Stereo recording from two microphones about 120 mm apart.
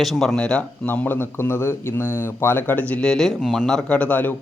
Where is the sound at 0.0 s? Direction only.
Centre (ahead or behind).